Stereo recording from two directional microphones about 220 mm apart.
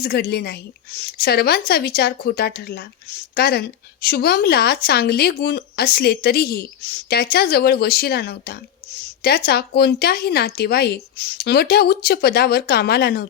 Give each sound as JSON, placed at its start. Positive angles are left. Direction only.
{"t": 0.0, "sound": "a woman's voice", "side_deg": 45}